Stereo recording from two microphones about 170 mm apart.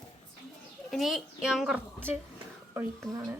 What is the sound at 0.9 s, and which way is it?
Speech, centre (ahead or behind).